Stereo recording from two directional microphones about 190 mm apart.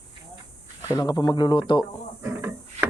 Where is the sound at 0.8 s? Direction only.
20° left (ahead or behind).